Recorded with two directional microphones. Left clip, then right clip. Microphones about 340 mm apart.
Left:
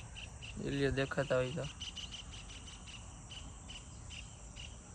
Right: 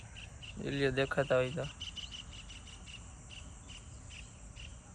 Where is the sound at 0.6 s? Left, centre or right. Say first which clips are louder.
Right 3 dB; centre.